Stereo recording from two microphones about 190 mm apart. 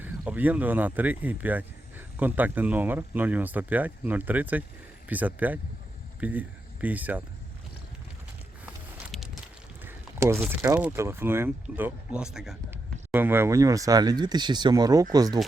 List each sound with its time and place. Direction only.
0.0 s speech: 10° right (ahead or behind)
9.1 s a sound: centre (ahead or behind)
9.8 s speech: 15° right (ahead or behind)